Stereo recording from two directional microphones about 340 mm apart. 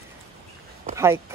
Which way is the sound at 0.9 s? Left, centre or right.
Centre.